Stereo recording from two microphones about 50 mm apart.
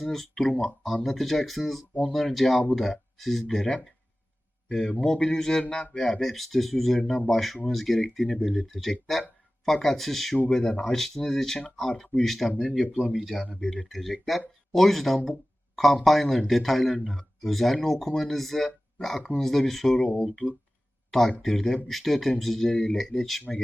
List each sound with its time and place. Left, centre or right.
0.0 s speech: centre
4.8 s a man's voice: left
6.1 s speech: centre
10.5 s speech: centre
20.0 s a man's voice: left
21.1 s speech: centre
22.7 s a man's voice: left
23.0 s speech: centre